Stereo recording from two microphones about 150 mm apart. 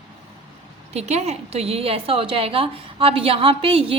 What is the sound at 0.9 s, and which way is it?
A woman's voice, 45° right (ahead or behind).